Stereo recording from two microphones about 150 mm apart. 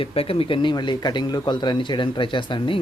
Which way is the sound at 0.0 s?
40° left (ahead or behind).